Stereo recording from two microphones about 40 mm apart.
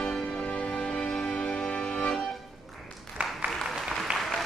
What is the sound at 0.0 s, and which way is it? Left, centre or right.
Music, left.